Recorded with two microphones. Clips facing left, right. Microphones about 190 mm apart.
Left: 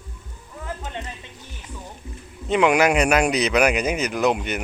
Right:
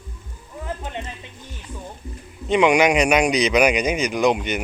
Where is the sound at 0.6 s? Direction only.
15° right (ahead or behind).